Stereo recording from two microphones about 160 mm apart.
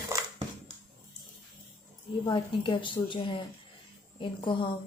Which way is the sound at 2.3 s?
30° left (ahead or behind).